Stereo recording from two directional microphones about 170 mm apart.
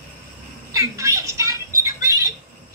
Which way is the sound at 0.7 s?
20° right (ahead or behind).